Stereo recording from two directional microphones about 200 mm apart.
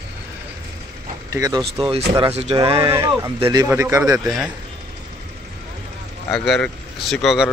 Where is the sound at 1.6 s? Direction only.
30° right (ahead or behind).